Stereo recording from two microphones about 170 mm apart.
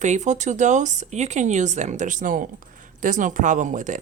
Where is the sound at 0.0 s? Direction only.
45° right (ahead or behind).